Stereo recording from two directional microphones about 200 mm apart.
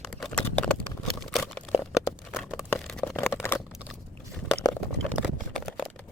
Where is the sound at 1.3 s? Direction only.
Centre (ahead or behind).